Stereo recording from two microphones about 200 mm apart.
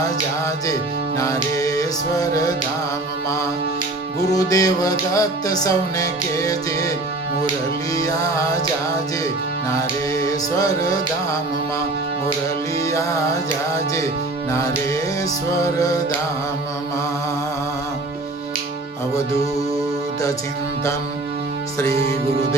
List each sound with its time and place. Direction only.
0.0 s music: 20° left (ahead or behind)
4.2 s music: 20° left (ahead or behind)
7.9 s music: 15° left (ahead or behind)
10.6 s music: 15° left (ahead or behind)
12.8 s music: 15° left (ahead or behind)
15.5 s music: 15° left (ahead or behind)